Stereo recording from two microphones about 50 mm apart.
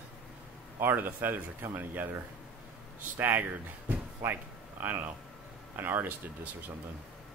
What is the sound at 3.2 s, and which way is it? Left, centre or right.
Speech, right.